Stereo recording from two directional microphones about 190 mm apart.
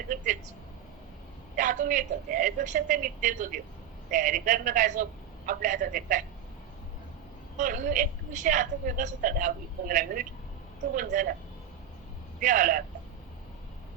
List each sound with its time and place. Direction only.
1.5 s a woman's voice: 40° right (ahead or behind)
7.5 s a woman's voice: 45° right (ahead or behind)
12.4 s a woman's voice: 45° right (ahead or behind)